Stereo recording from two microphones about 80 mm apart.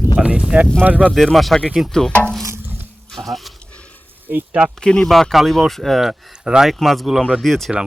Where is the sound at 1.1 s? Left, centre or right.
Centre.